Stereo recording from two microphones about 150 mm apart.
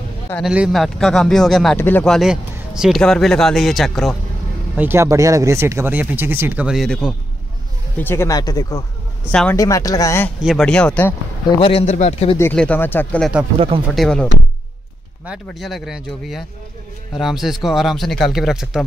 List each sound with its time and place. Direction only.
0.4 s speech: 5° right (ahead or behind)
1.8 s speech: 15° left (ahead or behind)
2.0 s speech: centre (ahead or behind)
4.7 s speech: 15° right (ahead or behind); by 7.2 s centre (ahead or behind)
8.0 s speech: 15° left (ahead or behind)
9.3 s speech: 5° left (ahead or behind)
9.6 s speech: 20° left (ahead or behind)
10.4 s speech: centre (ahead or behind)
11.6 s speech: 45° left (ahead or behind)
12.5 s speech: 10° left (ahead or behind)